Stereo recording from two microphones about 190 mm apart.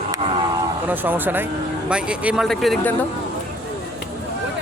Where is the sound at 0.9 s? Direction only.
10° right (ahead or behind).